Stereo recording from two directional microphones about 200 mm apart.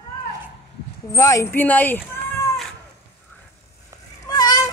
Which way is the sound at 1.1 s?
15° left (ahead or behind).